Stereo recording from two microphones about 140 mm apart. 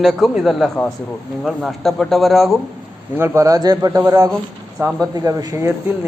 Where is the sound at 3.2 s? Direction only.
20° right (ahead or behind).